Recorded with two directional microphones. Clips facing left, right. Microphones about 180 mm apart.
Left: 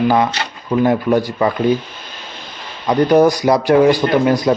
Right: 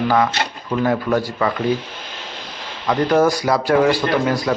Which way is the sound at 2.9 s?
15° left (ahead or behind).